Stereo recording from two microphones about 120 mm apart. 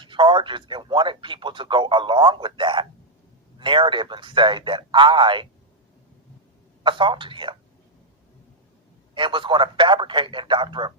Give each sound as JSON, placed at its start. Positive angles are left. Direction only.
{"t": 0.0, "sound": "speech", "side_deg": -40}
{"t": 6.8, "sound": "speech", "side_deg": -45}
{"t": 9.1, "sound": "speech", "side_deg": -45}